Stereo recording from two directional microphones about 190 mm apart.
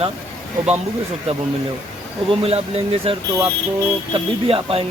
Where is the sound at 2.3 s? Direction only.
30° right (ahead or behind).